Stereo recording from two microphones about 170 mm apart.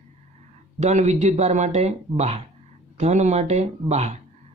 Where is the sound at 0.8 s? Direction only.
40° right (ahead or behind).